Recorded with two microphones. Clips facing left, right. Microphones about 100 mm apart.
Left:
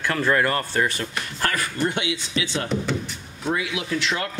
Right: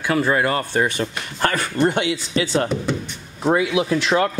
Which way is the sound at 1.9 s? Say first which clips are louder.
Right 6 dB; 40° right (ahead or behind).